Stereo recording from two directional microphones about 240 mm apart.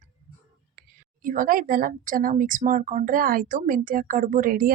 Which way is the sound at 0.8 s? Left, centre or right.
Right.